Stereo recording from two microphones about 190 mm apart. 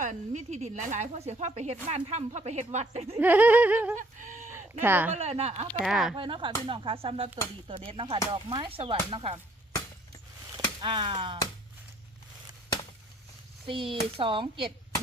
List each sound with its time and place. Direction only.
0.0 s speech: 40° right (ahead or behind)
3.2 s laughter: 10° right (ahead or behind)
3.9 s speech: 40° right (ahead or behind)
4.8 s laughter: 10° right (ahead or behind)
5.1 s speech: 35° right (ahead or behind)
5.8 s speech: centre (ahead or behind)
6.1 s chop: 25° right (ahead or behind)
10.8 s chop: 25° right (ahead or behind)
13.7 s chop: 25° right (ahead or behind)